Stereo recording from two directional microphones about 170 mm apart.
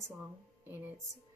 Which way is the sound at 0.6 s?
15° right (ahead or behind).